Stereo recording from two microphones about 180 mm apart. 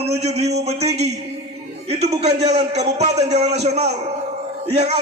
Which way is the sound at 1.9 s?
35° right (ahead or behind).